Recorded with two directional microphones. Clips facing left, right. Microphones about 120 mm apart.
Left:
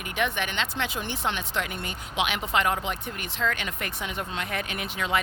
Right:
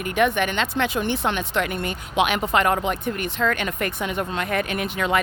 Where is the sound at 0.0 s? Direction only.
50° right (ahead or behind).